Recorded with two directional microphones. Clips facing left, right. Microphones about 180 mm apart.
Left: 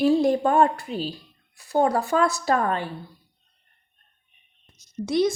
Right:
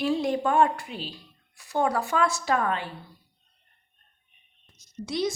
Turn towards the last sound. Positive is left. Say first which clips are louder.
# left 6 dB
turn(degrees=55)  # may be behind; listen again after turning